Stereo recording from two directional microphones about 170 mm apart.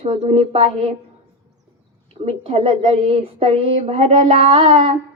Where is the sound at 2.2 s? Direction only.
35° right (ahead or behind).